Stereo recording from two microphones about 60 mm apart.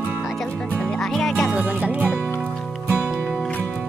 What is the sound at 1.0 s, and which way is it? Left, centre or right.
Music, centre.